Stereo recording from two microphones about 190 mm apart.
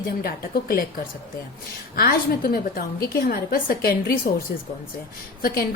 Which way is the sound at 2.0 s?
50° left (ahead or behind).